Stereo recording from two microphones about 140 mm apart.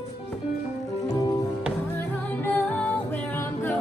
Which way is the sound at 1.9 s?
15° left (ahead or behind).